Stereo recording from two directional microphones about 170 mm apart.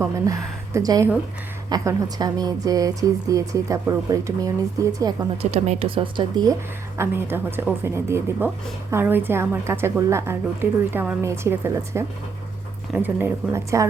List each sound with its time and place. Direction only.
0.0 s a woman's voice: 20° right (ahead or behind)
5.4 s speech: 40° right (ahead or behind)
6.9 s a woman's voice: 15° right (ahead or behind)